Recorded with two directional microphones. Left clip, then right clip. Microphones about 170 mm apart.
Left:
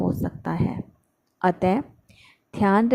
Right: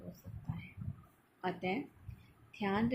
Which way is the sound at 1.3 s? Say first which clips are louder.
Left 16 dB; 70° left (ahead or behind).